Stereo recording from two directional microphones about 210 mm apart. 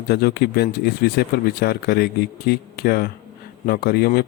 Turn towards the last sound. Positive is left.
turn(degrees=45)  # may be behind; listen again after turning